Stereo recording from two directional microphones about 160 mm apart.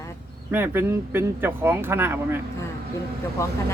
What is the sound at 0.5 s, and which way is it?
Speech, 15° right (ahead or behind).